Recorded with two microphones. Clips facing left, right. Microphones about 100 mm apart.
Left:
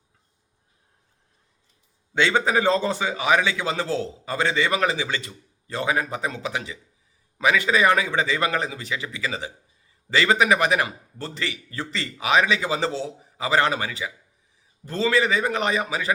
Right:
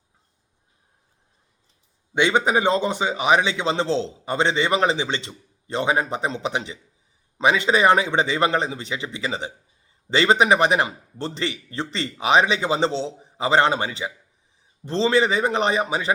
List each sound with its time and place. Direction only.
2.1 s a man's voice: 20° right (ahead or behind)